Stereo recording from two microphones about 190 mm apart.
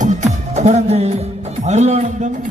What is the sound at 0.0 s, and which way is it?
Music, 35° right (ahead or behind).